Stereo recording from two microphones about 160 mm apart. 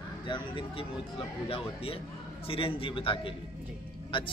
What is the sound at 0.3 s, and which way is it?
A man's voice, 30° left (ahead or behind).